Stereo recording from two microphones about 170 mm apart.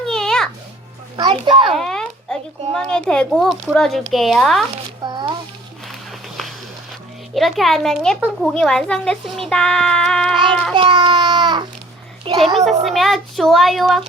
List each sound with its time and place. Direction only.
0.0 s music: 5° left (ahead or behind)
1.1 s a child's voice: 30° right (ahead or behind)
1.7 s a child's voice: 5° left (ahead or behind)
5.0 s a sound: 25° right (ahead or behind)
5.9 s walk: centre (ahead or behind)
7.3 s a child's voice: centre (ahead or behind)
10.8 s a child's voice: 30° right (ahead or behind)
12.8 s a child's voice: centre (ahead or behind)